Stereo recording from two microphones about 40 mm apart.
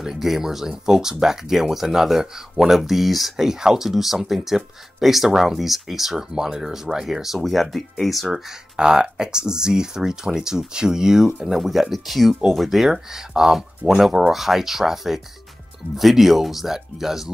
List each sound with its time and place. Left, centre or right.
0.0 s speech: centre
2.8 s speech: centre
8.5 s speech: centre
11.5 s speech: centre